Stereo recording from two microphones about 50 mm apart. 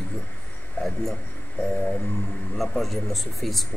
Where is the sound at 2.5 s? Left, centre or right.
Centre.